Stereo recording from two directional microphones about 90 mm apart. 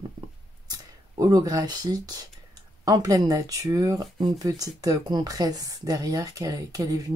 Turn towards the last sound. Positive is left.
turn(degrees=-40)  # may be behind; listen again after turning